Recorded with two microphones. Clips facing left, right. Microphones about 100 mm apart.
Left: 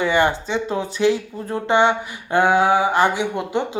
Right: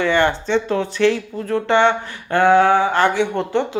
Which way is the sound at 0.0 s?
10° left (ahead or behind).